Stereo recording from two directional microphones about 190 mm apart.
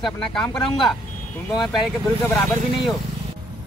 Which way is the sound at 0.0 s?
Centre (ahead or behind).